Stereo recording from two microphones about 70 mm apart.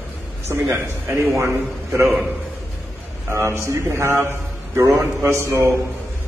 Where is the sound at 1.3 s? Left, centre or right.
Right.